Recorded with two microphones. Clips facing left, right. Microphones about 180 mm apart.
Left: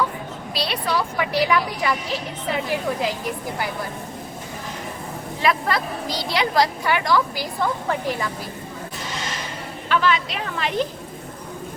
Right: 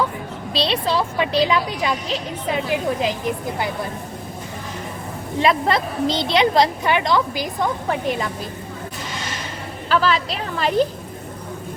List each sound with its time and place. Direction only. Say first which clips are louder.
0.5 s speech: right 4 dB; 25° right (ahead or behind)
5.4 s speech: right 4 dB; 25° right (ahead or behind)
9.9 s a woman's voice: right 2 dB; 35° right (ahead or behind)